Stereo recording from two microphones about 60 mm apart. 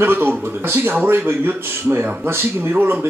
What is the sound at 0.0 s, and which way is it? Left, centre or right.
A man's voice, right.